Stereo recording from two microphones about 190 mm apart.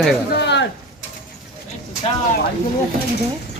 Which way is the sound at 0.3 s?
65° left (ahead or behind).